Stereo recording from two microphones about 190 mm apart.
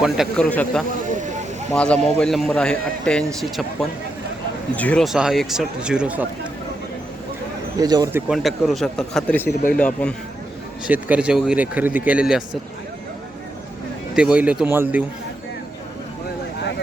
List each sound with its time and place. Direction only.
0.0 s a man's voice: centre (ahead or behind)
0.4 s a man's voice: 10° left (ahead or behind)
7.8 s speech: 20° right (ahead or behind)
8.3 s a man's voice: centre (ahead or behind)
10.8 s speech: 5° right (ahead or behind)
14.2 s speech: 5° right (ahead or behind)